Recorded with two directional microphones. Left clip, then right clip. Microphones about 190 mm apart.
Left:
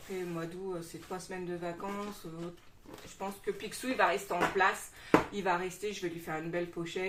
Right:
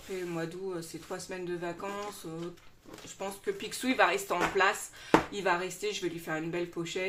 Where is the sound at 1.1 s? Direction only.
35° right (ahead or behind).